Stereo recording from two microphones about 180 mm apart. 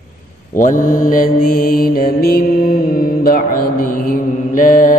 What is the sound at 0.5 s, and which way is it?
Mantra, 45° left (ahead or behind).